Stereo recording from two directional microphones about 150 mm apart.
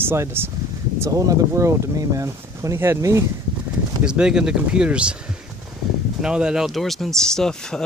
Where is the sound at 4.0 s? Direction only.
5° right (ahead or behind).